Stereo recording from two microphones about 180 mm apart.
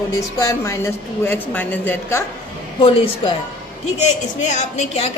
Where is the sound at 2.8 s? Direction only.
30° left (ahead or behind).